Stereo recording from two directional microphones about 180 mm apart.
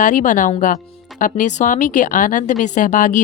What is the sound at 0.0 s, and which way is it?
Speech, 45° left (ahead or behind).